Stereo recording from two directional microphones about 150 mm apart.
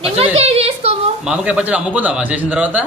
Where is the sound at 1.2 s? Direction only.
5° right (ahead or behind).